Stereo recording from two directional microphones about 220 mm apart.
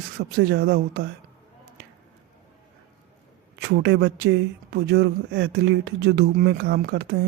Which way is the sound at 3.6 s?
50° right (ahead or behind).